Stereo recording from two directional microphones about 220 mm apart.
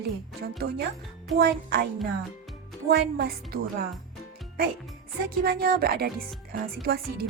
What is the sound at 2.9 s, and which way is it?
Speech, 45° right (ahead or behind).